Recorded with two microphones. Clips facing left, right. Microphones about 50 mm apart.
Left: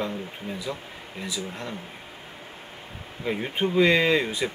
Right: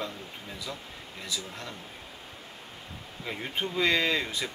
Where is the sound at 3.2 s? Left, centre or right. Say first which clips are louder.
Left 7 dB; left.